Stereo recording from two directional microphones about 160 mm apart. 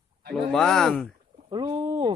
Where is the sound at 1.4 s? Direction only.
30° right (ahead or behind).